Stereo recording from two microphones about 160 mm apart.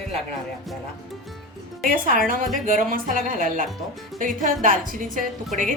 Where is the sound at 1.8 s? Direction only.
55° right (ahead or behind).